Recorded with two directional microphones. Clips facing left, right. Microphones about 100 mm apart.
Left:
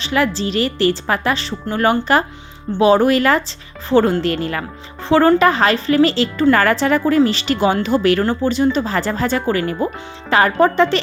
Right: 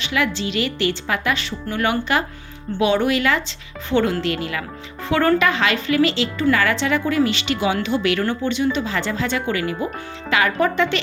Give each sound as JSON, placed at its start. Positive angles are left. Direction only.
{"t": 0.0, "sound": "speech", "side_deg": 35}
{"t": 5.0, "sound": "speech", "side_deg": 30}